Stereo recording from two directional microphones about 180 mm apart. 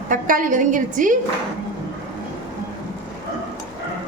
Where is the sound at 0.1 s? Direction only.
50° right (ahead or behind).